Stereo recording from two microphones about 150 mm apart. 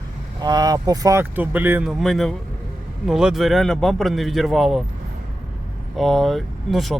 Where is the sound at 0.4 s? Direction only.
25° right (ahead or behind).